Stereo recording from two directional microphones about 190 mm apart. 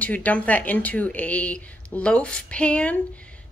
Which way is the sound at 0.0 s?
10° left (ahead or behind).